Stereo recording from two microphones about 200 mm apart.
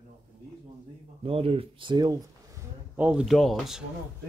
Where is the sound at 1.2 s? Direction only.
30° right (ahead or behind).